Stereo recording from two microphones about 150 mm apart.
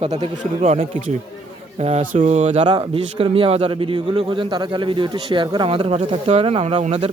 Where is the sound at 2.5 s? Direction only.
30° right (ahead or behind).